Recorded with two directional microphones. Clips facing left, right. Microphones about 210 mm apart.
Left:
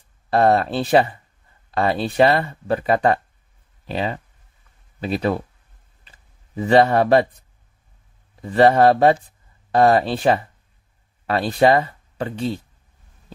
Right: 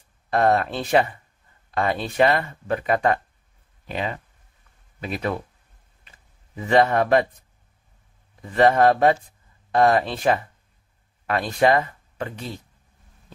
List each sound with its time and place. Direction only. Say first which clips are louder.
0.3 s speech: left 3 dB; 30° left (ahead or behind)
6.0 s a sound: left 1 dB; 35° left (ahead or behind)
8.4 s speech: left 3 dB; 30° left (ahead or behind)